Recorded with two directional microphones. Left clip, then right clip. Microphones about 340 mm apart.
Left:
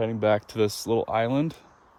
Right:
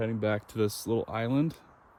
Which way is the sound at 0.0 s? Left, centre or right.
Centre.